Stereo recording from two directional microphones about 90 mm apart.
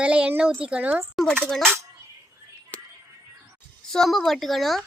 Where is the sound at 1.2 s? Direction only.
5° left (ahead or behind).